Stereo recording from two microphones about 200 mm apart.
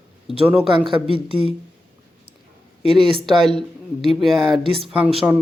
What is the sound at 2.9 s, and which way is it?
Speech, centre (ahead or behind).